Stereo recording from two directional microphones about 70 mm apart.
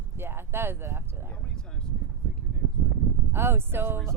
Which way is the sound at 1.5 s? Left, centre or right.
Centre.